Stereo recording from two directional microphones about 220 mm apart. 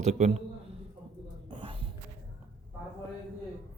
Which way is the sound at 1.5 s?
25° right (ahead or behind).